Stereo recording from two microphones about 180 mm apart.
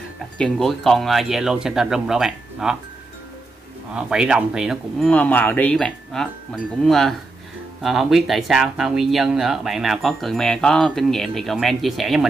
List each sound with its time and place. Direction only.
0.4 s speech: centre (ahead or behind)
3.9 s speech: 5° right (ahead or behind)